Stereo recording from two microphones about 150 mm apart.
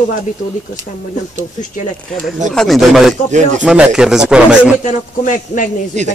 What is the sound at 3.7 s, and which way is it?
Speech, 5° right (ahead or behind).